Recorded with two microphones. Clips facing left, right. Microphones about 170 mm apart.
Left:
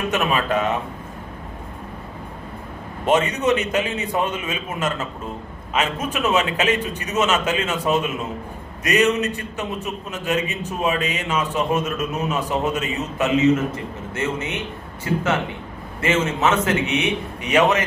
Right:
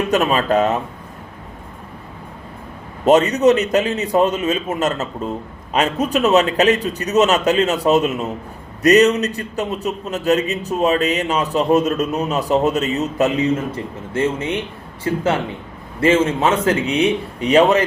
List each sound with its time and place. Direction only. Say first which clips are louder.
0.1 s a man's voice: right 5 dB; 35° right (ahead or behind)
3.1 s a man's voice: right 6 dB; 40° right (ahead or behind)